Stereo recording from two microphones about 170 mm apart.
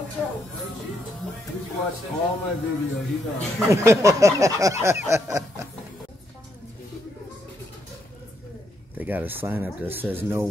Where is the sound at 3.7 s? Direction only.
15° right (ahead or behind).